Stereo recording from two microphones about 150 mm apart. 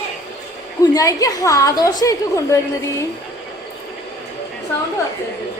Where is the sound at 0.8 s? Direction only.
25° left (ahead or behind).